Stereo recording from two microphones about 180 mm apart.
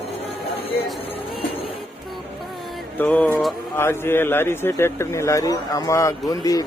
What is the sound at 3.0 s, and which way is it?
Speech, 10° left (ahead or behind).